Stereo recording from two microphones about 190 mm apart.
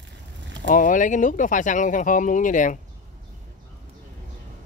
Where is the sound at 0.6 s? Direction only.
45° left (ahead or behind).